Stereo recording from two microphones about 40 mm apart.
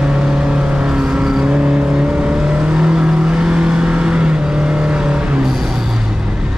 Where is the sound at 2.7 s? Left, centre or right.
Right.